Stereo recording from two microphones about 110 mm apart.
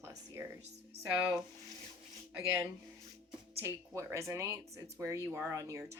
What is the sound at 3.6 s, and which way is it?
Speech, 25° right (ahead or behind).